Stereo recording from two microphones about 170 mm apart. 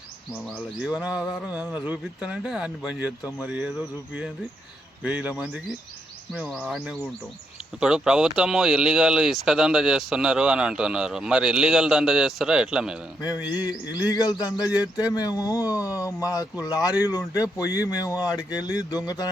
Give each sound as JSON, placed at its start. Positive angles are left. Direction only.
{"t": 0.8, "sound": "speech", "side_deg": -5}
{"t": 14.1, "sound": "speech", "side_deg": 25}